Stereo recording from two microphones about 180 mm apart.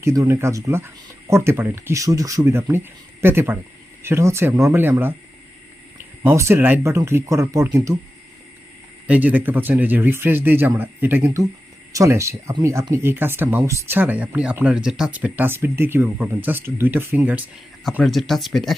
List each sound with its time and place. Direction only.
0.0 s speech: 15° right (ahead or behind)
6.2 s speech: 15° right (ahead or behind)
9.0 s speech: 10° right (ahead or behind)